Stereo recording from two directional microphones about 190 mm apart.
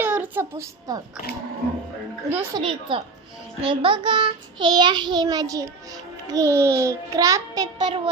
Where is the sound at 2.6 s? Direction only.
25° right (ahead or behind).